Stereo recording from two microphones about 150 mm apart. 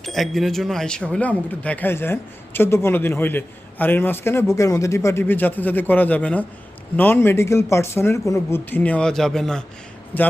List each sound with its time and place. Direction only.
0.0 s a man's voice: centre (ahead or behind)